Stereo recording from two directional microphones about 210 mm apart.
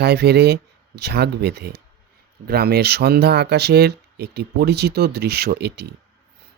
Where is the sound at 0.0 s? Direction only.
50° right (ahead or behind).